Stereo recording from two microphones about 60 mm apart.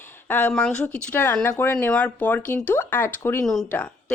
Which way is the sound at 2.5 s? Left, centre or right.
Left.